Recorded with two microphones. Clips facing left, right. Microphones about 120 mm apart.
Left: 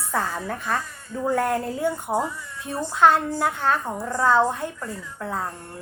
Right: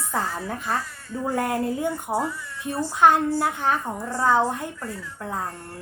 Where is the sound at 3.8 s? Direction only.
15° left (ahead or behind).